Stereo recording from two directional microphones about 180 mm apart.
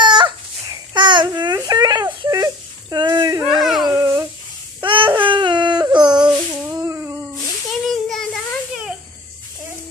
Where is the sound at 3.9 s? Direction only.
15° right (ahead or behind).